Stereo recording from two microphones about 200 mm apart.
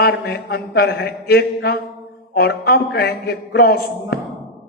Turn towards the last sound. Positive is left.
turn(degrees=50)  # may be behind; listen again after turning